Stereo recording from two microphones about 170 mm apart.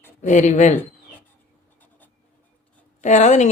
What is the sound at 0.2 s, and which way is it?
Speech, 45° left (ahead or behind).